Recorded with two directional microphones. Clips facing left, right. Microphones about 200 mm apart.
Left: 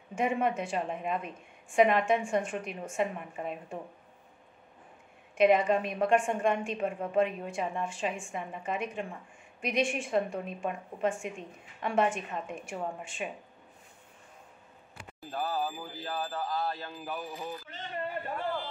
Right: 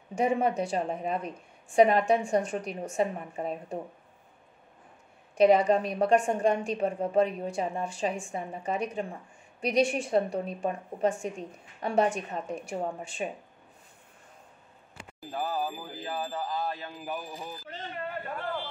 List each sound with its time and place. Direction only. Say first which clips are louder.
0.1 s a woman's voice: right 3 dB; 40° right (ahead or behind)
5.3 s a woman's voice: right 3 dB; 35° right (ahead or behind)
15.3 s speech: right 1 dB; 10° right (ahead or behind)